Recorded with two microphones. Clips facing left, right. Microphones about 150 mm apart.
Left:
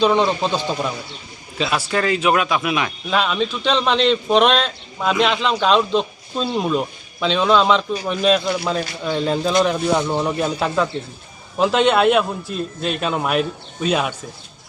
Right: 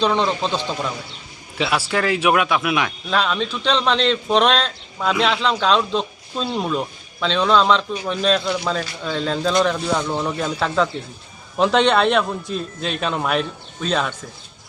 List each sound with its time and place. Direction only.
0.0 s speech: 5° left (ahead or behind)
1.9 s a man's voice: 5° right (ahead or behind)